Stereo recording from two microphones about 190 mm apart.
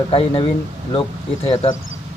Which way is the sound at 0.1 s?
30° left (ahead or behind).